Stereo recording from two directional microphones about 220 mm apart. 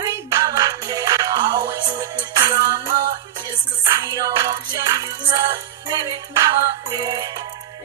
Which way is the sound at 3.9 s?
15° right (ahead or behind).